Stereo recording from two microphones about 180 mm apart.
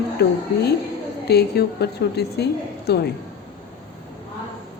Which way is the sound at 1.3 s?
65° left (ahead or behind).